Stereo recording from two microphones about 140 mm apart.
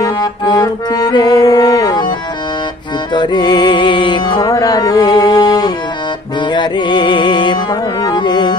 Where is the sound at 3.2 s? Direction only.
30° left (ahead or behind).